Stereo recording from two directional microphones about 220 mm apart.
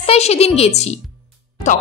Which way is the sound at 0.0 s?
30° left (ahead or behind).